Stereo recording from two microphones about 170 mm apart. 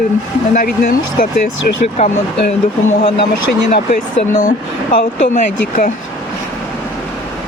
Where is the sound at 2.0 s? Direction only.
40° left (ahead or behind).